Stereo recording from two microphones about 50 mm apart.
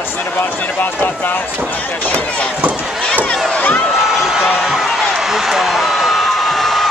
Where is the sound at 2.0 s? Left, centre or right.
Left.